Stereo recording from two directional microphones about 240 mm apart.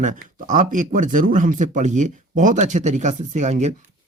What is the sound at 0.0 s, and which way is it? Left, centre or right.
Speech, right.